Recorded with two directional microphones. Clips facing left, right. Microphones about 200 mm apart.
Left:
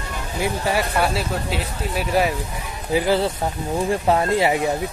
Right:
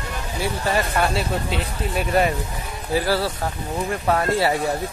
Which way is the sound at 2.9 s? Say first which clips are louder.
Left 2 dB; 20° left (ahead or behind).